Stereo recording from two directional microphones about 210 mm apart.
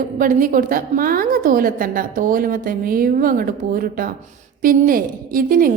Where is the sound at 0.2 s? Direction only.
40° right (ahead or behind).